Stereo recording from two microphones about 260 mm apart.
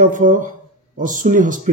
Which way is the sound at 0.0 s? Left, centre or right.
Right.